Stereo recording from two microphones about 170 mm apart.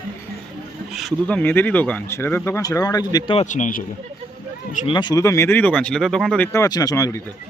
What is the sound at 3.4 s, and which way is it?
Speech, 45° left (ahead or behind).